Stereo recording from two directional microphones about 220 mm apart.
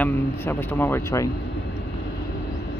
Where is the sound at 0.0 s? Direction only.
10° left (ahead or behind).